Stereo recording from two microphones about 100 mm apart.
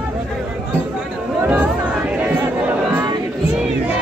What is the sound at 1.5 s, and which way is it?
Music, 10° right (ahead or behind).